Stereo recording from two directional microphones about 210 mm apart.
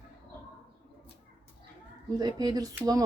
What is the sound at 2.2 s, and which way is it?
Speech, 20° right (ahead or behind).